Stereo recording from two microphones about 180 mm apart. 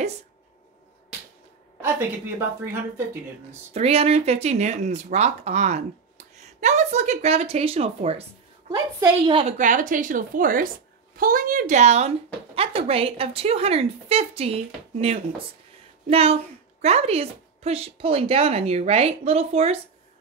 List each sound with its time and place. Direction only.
2.6 s speech: 10° right (ahead or behind)
3.7 s speech: 35° right (ahead or behind)
8.7 s a woman's voice: 20° right (ahead or behind)
9.4 s a woman's voice: 40° right (ahead or behind)